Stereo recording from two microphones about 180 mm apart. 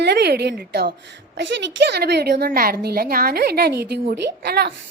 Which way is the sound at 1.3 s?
75° right (ahead or behind).